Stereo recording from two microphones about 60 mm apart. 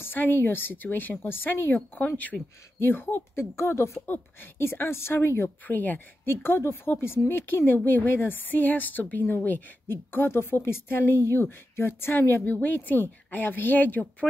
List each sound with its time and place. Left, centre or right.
0.0 s a woman's voice: left
2.8 s speech: left
4.0 s a woman's voice: left
5.7 s a woman's voice: left